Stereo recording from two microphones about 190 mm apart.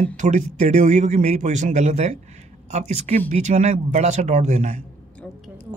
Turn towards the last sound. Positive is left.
turn(degrees=-35)  # may be behind; listen again after turning